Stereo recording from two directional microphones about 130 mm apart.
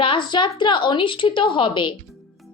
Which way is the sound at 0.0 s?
40° left (ahead or behind).